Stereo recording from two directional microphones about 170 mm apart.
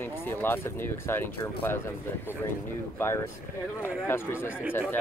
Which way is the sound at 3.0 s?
15° left (ahead or behind).